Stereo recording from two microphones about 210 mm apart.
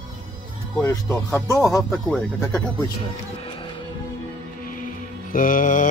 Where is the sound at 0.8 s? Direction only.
10° left (ahead or behind).